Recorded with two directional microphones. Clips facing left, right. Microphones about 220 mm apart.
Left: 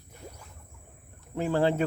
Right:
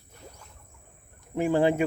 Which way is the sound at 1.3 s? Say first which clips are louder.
Right 3 dB; 15° right (ahead or behind).